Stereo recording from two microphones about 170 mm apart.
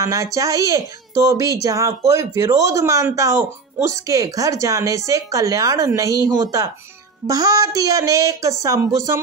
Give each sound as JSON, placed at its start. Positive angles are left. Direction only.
{"t": 0.0, "sound": "speech", "side_deg": -20}